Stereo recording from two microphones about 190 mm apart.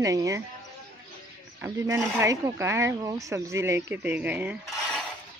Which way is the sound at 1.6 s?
15° right (ahead or behind).